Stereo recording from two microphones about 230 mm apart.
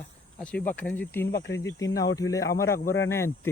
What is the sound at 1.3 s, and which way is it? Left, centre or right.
Speech, left.